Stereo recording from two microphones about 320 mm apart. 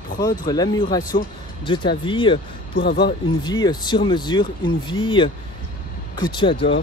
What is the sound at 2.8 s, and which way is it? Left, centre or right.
Speech, left.